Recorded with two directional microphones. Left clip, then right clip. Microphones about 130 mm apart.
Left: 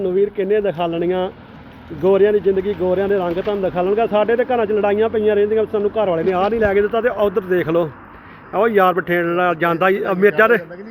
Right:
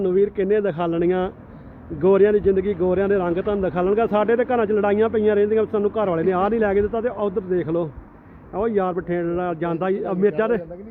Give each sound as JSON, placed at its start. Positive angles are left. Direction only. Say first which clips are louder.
{"t": 0.0, "sound": "speech", "louder": "left 2 dB", "side_deg": -30}
{"t": 6.7, "sound": "a man's voice", "louder": "left 5 dB", "side_deg": -10}